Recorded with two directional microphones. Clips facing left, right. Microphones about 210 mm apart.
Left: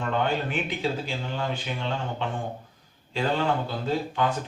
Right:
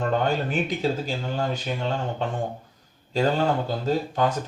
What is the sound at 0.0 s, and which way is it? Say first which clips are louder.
Speech: right 3 dB; 40° right (ahead or behind).